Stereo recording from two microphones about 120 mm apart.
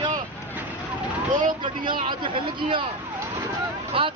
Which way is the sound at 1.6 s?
45° right (ahead or behind).